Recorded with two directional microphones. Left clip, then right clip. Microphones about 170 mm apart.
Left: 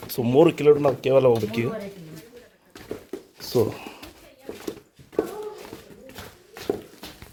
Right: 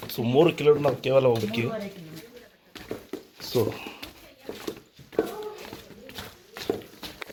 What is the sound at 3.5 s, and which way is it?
Speech, 45° left (ahead or behind).